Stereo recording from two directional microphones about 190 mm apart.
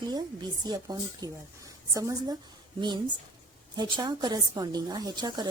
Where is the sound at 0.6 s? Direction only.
20° right (ahead or behind).